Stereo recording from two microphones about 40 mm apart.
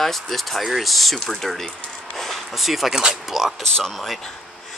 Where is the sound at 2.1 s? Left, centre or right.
Centre.